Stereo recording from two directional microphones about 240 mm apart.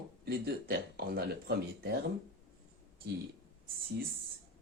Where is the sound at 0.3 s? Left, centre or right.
Right.